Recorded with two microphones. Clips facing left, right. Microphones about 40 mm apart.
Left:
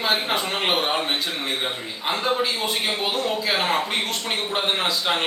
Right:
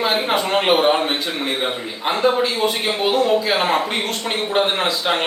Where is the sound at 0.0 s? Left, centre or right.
Centre.